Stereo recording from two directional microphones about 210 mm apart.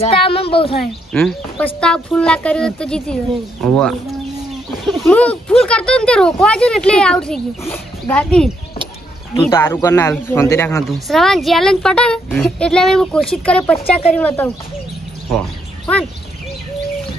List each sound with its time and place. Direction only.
0.0 s speech: 25° left (ahead or behind)
1.1 s speech: 5° left (ahead or behind)
5.0 s speech: 5° left (ahead or behind)
9.3 s speech: 25° left (ahead or behind)
9.6 s speech: 10° left (ahead or behind)
11.1 s speech: centre (ahead or behind)